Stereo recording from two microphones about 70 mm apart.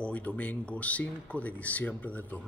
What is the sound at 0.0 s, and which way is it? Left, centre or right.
A man's voice, centre.